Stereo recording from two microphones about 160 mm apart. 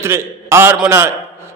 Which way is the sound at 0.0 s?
15° right (ahead or behind).